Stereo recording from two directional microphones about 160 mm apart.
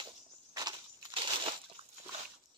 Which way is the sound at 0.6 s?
30° right (ahead or behind).